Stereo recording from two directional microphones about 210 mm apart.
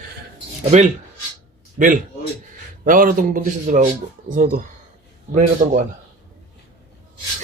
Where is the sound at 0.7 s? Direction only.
30° right (ahead or behind).